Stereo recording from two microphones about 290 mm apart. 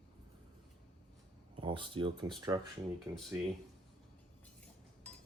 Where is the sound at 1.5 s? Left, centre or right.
Centre.